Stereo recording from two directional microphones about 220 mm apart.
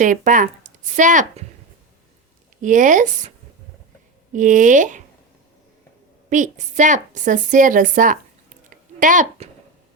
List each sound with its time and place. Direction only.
0.0 s speech: 35° right (ahead or behind)
2.6 s a woman's voice: 35° right (ahead or behind)
4.3 s a woman's voice: 35° right (ahead or behind)
6.3 s a woman's voice: 35° right (ahead or behind)
8.7 s a sound: 35° right (ahead or behind)